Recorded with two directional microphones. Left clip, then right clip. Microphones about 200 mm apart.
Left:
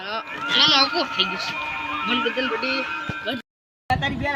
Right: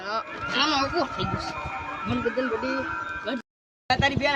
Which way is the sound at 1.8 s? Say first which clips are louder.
Left 6 dB; 55° right (ahead or behind).